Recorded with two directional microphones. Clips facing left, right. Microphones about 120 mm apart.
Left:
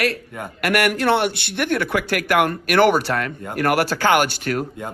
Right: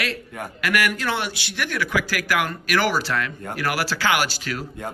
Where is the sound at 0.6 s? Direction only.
60° left (ahead or behind).